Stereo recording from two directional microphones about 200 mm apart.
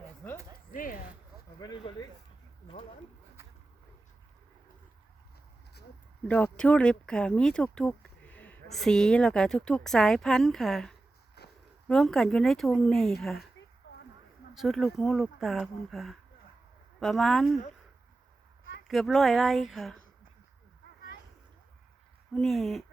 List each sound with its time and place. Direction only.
0.7 s speech: 45° left (ahead or behind)
1.5 s speech: 20° left (ahead or behind)
6.2 s speech: 5° left (ahead or behind)
11.4 s a sound: 55° left (ahead or behind)
11.9 s speech: centre (ahead or behind)
14.5 s speech: centre (ahead or behind)
18.9 s speech: centre (ahead or behind)
22.4 s speech: centre (ahead or behind)